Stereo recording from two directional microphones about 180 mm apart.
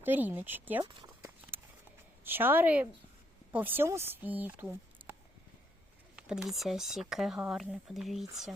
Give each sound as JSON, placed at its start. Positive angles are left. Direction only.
{"t": 0.0, "sound": "speech", "side_deg": -10}
{"t": 1.2, "sound": "a sound", "side_deg": -10}
{"t": 2.2, "sound": "speech", "side_deg": -10}
{"t": 6.1, "sound": "speech", "side_deg": -5}